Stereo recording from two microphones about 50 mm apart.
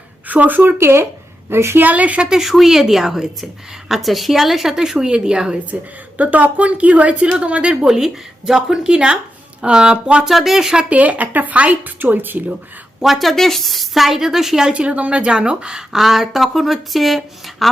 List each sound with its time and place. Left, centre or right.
0.3 s speech: right
0.8 s a woman's voice: right
1.8 s a woman's voice: right
2.3 s a woman's voice: centre
6.1 s speech: right
10.2 s a woman's voice: centre
10.8 s a woman's voice: right
13.0 s a woman's voice: centre
14.7 s a woman's voice: right; by 17.7 s centre